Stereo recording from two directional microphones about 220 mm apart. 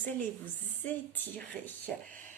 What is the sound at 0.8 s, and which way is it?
A woman's voice, 10° left (ahead or behind).